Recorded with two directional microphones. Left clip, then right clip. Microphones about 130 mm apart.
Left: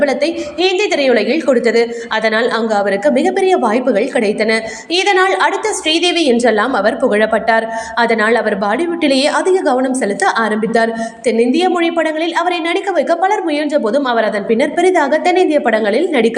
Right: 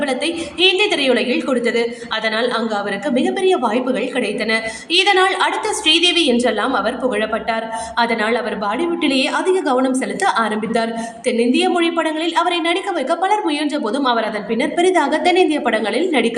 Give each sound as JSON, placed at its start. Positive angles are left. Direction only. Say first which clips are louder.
{"t": 0.0, "sound": "a woman's voice", "louder": "left 6 dB", "side_deg": 25}